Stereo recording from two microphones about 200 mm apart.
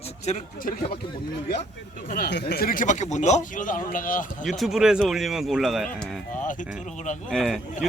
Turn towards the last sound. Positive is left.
turn(degrees=0)  # may be behind; listen again after turning